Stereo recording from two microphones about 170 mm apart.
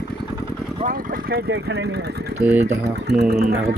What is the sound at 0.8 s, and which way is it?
Speech, 55° right (ahead or behind).